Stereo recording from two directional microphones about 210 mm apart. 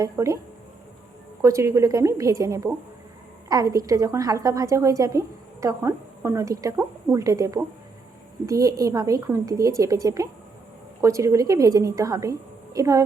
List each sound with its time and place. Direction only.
0.0 s a woman's voice: 15° right (ahead or behind)
1.4 s a woman's voice: 15° right (ahead or behind)